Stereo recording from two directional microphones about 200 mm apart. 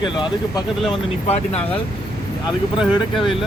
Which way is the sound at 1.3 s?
30° left (ahead or behind).